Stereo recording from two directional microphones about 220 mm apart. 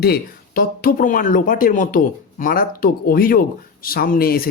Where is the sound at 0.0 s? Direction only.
45° left (ahead or behind).